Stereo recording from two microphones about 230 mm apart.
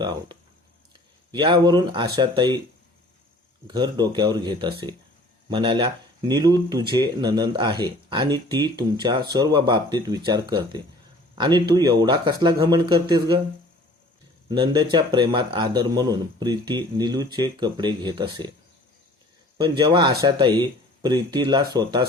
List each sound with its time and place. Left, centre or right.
1.3 s speech: centre
3.7 s speech: centre
14.4 s speech: centre
19.5 s speech: centre